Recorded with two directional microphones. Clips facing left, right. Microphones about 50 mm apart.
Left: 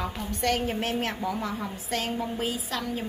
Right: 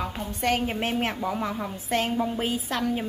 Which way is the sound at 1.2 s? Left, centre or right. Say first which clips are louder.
Right 2 dB; right.